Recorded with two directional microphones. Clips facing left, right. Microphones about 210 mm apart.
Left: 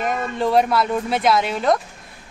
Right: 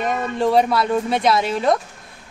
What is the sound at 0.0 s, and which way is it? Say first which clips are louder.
A woman's voice: right 2 dB; centre (ahead or behind).